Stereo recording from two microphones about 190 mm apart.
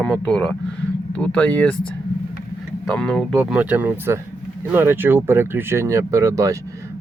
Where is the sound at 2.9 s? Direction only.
5° left (ahead or behind).